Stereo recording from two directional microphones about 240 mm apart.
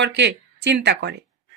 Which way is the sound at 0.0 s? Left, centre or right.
Right.